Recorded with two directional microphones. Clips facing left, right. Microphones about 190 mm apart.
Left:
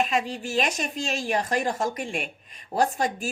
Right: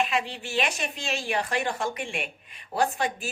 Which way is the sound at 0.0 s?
40° left (ahead or behind).